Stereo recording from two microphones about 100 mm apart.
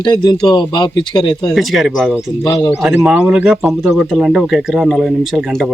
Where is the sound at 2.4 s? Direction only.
45° left (ahead or behind).